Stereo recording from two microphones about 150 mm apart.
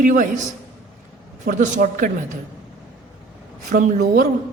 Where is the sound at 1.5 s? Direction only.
60° right (ahead or behind).